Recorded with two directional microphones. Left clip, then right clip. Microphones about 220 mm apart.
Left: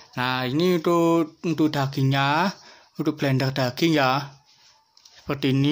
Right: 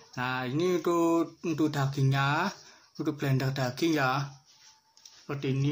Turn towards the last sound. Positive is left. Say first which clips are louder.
# left 9 dB
turn(degrees=45)  # may be behind; listen again after turning